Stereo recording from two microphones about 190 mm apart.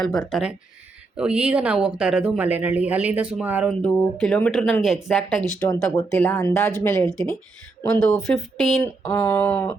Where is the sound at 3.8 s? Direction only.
5° left (ahead or behind).